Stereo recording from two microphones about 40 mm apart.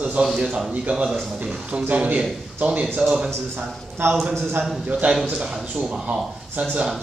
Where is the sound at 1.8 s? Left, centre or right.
Right.